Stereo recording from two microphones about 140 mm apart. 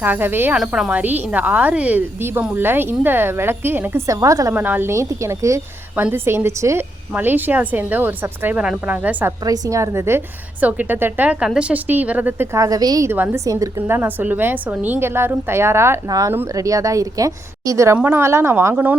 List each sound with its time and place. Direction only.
0.0 s a woman's voice: 15° right (ahead or behind)
9.4 s a woman's voice: 25° right (ahead or behind)
12.5 s speech: 25° right (ahead or behind)
13.1 s a woman's voice: 15° right (ahead or behind)